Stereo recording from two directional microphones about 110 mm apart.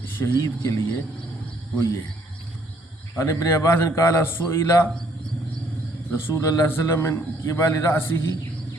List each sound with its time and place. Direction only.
0.2 s a man's voice: 20° left (ahead or behind)
3.2 s a man's voice: 25° left (ahead or behind)
6.1 s a man's voice: 25° left (ahead or behind)